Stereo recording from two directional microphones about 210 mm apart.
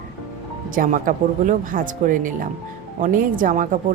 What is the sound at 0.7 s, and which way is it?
Speech, 40° right (ahead or behind).